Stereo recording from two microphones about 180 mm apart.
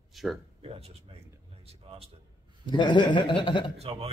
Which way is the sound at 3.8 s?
35° right (ahead or behind).